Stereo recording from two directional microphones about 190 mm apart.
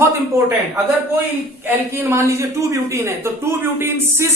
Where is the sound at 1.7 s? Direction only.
15° right (ahead or behind).